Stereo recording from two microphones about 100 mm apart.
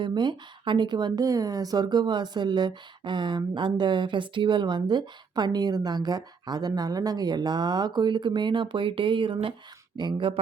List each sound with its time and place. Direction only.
0.0 s speech: 50° right (ahead or behind)